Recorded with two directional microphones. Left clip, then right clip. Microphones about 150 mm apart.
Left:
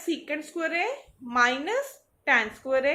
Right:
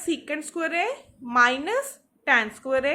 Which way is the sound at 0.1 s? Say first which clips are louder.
Right 2 dB; 45° right (ahead or behind).